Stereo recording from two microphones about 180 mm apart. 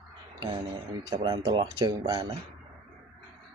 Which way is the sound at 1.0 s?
20° right (ahead or behind).